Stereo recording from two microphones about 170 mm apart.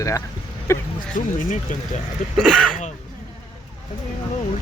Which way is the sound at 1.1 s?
50° left (ahead or behind).